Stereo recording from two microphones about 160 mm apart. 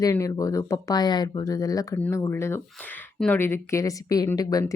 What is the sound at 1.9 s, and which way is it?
Speech, 10° left (ahead or behind).